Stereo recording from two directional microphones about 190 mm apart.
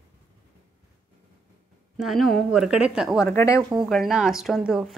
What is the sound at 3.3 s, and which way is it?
Speech, 15° left (ahead or behind).